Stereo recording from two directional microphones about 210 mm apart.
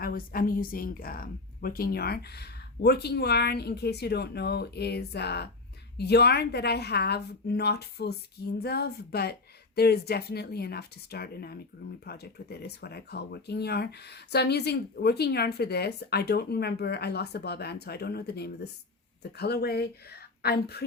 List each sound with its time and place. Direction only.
0.0 s speech: 45° left (ahead or behind)